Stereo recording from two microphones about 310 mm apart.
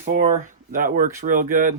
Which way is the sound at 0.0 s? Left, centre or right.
Right.